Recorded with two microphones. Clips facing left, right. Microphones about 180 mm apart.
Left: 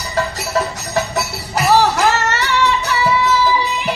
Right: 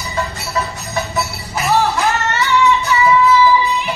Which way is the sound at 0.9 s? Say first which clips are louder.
Left 1 dB; 75° left (ahead or behind).